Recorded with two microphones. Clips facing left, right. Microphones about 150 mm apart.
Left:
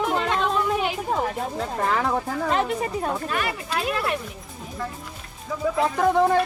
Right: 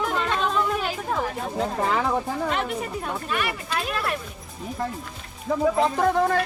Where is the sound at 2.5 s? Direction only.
35° left (ahead or behind).